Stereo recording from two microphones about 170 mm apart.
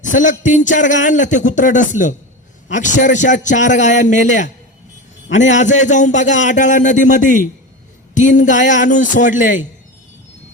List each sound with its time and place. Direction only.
0.0 s a man's voice: 45° left (ahead or behind)